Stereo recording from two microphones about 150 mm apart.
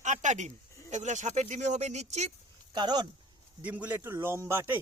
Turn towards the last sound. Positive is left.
turn(degrees=-15)  # may be behind; listen again after turning